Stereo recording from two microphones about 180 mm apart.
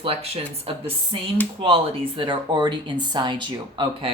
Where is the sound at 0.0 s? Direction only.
30° right (ahead or behind).